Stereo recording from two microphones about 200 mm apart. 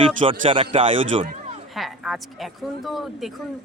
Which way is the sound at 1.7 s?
Centre (ahead or behind).